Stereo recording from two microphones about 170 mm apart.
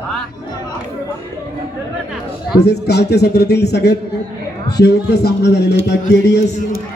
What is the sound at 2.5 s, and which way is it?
A man's voice, 75° left (ahead or behind).